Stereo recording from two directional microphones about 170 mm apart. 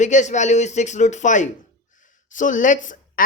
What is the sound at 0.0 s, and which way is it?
Speech, 45° left (ahead or behind).